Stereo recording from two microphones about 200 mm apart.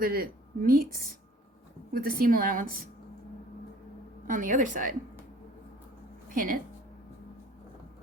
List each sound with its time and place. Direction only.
0.0 s a woman's voice: 45° right (ahead or behind)
1.9 s a woman's voice: 50° right (ahead or behind)
4.3 s a woman's voice: 40° right (ahead or behind)
6.3 s a woman's voice: 45° right (ahead or behind)